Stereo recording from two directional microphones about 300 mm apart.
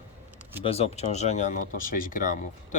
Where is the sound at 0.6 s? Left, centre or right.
Centre.